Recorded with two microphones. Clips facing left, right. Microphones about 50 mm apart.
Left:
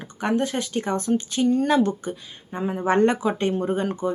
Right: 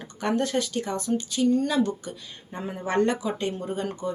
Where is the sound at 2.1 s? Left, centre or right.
Centre; by 3.8 s left.